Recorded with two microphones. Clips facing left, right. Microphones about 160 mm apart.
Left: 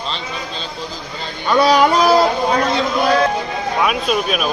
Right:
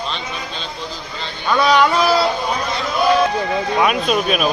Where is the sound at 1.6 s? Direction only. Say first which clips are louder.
Left 2 dB; 35° left (ahead or behind).